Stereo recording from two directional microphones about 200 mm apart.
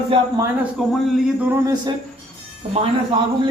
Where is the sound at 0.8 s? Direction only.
Centre (ahead or behind); by 1.9 s 20° right (ahead or behind).